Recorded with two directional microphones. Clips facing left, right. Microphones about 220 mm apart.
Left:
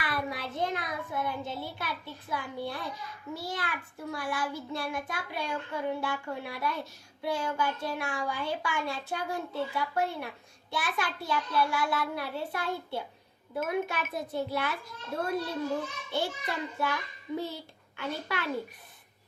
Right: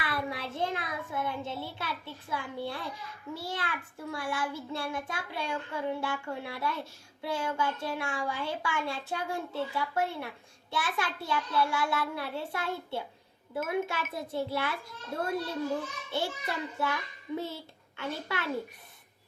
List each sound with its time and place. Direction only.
0.0 s a child's voice: 25° right (ahead or behind)